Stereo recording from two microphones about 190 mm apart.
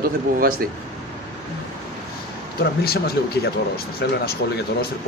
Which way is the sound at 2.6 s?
55° left (ahead or behind).